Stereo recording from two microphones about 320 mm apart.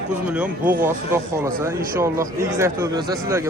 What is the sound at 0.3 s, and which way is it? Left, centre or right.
Speech, centre.